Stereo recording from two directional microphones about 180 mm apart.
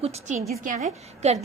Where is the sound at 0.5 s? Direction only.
45° right (ahead or behind).